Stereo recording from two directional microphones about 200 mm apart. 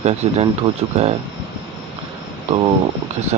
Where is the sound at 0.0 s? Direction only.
30° right (ahead or behind).